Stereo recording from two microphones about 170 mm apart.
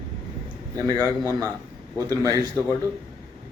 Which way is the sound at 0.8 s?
20° right (ahead or behind).